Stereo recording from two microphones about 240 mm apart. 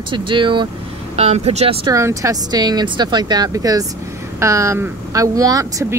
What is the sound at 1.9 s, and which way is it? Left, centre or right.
Speech, centre.